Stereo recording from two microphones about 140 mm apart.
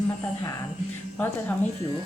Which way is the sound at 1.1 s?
15° left (ahead or behind).